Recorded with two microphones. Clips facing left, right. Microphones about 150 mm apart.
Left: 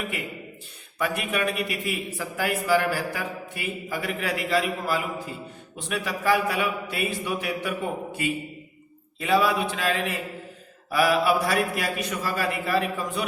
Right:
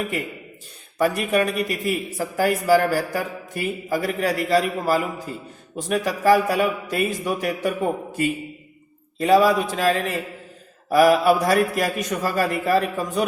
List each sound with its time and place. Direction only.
0.9 s speech: 40° right (ahead or behind)